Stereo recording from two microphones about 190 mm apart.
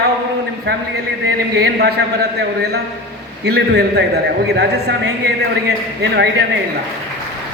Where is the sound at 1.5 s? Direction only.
60° right (ahead or behind).